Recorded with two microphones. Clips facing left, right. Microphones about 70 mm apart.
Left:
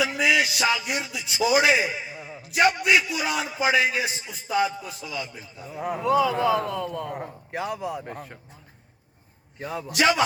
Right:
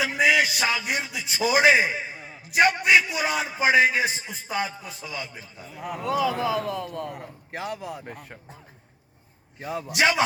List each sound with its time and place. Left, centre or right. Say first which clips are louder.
0.0 s speech: right 1 dB; right
5.6 s speech: left 5 dB; left
6.0 s a man's voice: left 3 dB; centre
9.9 s speech: left 1 dB; right